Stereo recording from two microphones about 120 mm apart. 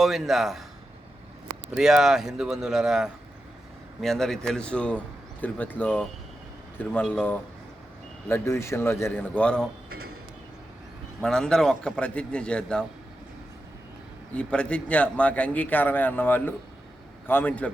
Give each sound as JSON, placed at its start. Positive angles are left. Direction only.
{"t": 0.0, "sound": "speech", "side_deg": -5}
{"t": 1.7, "sound": "a man's voice", "side_deg": -5}
{"t": 9.3, "sound": "a man's voice", "side_deg": 10}
{"t": 11.2, "sound": "a man's voice", "side_deg": 5}
{"t": 14.3, "sound": "a man's voice", "side_deg": 10}